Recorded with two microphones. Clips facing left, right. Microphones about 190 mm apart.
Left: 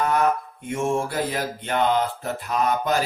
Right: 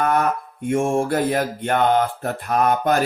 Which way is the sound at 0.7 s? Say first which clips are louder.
Right 5 dB; 50° right (ahead or behind).